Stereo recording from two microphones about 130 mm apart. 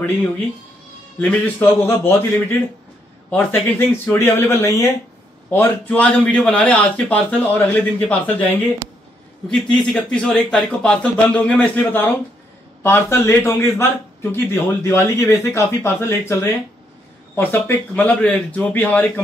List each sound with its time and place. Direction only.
1.2 s a man's voice: 15° left (ahead or behind)
3.3 s a man's voice: 15° left (ahead or behind)